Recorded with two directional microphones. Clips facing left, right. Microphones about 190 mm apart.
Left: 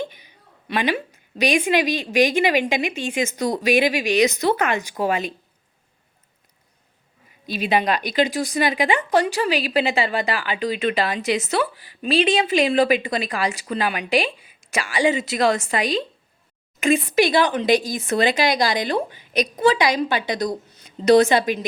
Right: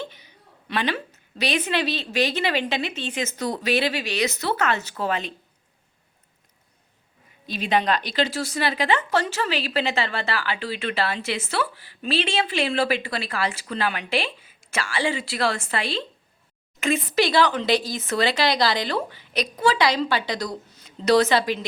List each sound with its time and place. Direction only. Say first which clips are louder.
0.0 s a sound: left 5 dB; 15° left (ahead or behind)
0.7 s speech: left 3 dB; 10° left (ahead or behind)
7.4 s a woman's voice: left 2 dB; 10° left (ahead or behind)